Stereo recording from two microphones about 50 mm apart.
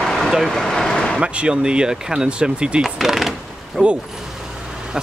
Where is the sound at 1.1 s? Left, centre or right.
Right.